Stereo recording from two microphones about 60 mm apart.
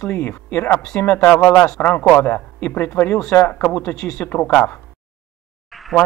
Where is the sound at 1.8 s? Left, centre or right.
Left.